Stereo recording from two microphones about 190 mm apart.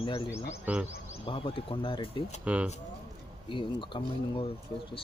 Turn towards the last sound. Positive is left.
turn(degrees=25)  # may be behind; listen again after turning